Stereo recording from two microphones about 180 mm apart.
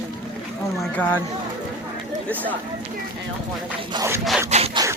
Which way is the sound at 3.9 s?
15° right (ahead or behind).